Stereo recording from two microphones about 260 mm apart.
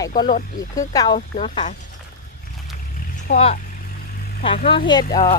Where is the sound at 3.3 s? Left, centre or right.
Left.